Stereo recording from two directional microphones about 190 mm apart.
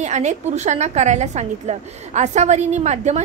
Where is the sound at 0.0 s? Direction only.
40° right (ahead or behind).